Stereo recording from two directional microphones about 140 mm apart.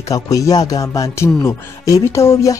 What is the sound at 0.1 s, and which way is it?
Speech, 25° left (ahead or behind).